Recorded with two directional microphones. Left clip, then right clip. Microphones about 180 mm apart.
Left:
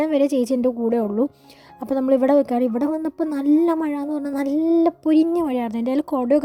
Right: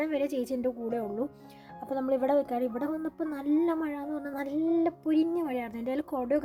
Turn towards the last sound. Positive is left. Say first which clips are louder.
# left 10 dB
turn(degrees=45)  # may be behind; listen again after turning